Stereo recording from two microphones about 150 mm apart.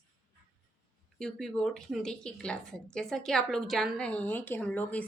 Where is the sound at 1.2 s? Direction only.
5° left (ahead or behind).